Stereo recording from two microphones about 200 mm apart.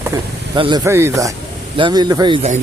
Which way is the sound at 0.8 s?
15° right (ahead or behind).